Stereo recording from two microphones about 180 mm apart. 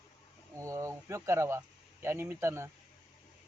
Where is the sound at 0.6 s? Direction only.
15° right (ahead or behind).